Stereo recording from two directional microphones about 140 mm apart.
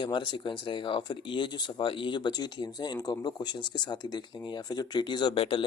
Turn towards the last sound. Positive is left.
turn(degrees=40)  # may be behind; listen again after turning